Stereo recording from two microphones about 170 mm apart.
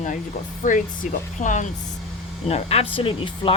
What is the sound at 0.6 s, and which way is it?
Speech, 50° left (ahead or behind).